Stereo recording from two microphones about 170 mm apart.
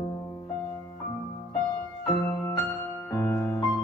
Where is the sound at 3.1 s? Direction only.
15° left (ahead or behind).